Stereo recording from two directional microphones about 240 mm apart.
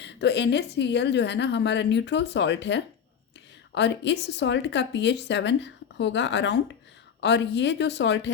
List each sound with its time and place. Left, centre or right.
0.0 s speech: left